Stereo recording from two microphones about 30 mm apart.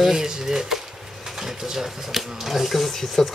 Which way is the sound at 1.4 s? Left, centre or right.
Centre.